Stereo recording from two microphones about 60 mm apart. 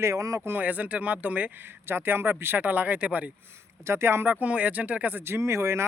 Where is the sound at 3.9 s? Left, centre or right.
Right.